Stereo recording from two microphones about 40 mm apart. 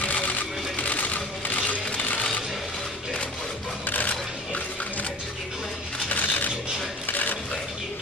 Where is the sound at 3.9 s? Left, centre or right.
Left.